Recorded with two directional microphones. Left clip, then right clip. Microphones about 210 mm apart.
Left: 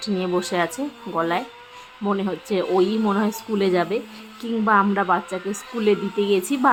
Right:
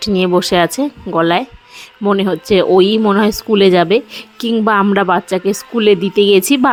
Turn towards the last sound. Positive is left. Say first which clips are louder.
# right 11 dB
turn(degrees=-45)  # may be behind; listen again after turning